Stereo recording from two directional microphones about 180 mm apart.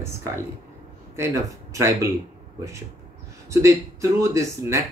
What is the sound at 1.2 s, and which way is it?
Speech, 15° right (ahead or behind).